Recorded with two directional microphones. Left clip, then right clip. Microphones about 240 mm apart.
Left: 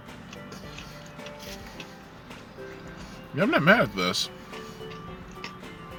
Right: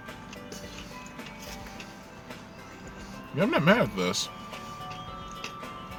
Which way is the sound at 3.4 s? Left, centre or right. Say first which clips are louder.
Left 3 dB; centre.